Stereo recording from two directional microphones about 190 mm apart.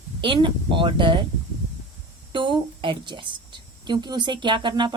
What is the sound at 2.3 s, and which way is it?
A woman's voice, 25° right (ahead or behind).